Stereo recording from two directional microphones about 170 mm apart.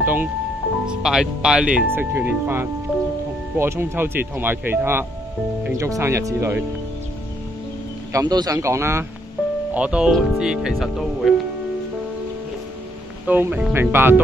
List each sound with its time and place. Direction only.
0.0 s music: 10° right (ahead or behind)
0.8 s speech: 5° right (ahead or behind)
8.1 s speech: 20° right (ahead or behind)
9.8 s speech: 5° right (ahead or behind)
13.3 s speech: 10° right (ahead or behind)